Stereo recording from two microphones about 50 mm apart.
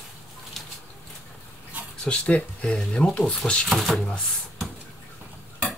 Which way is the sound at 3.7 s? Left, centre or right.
Centre.